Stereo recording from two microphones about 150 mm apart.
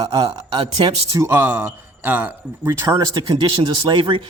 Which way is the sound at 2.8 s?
25° right (ahead or behind).